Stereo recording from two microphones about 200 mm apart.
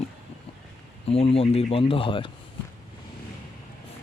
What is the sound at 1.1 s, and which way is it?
Speech, 30° left (ahead or behind).